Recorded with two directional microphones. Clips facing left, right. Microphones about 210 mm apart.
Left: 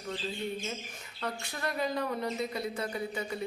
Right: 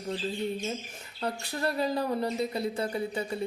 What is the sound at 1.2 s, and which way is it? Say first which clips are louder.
Speech: right 5 dB; 35° right (ahead or behind).